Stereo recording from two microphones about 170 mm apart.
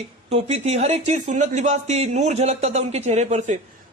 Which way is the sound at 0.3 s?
35° right (ahead or behind).